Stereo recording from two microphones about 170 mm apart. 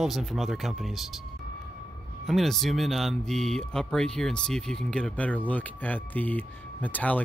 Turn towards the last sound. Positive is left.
turn(degrees=10)  # may be behind; listen again after turning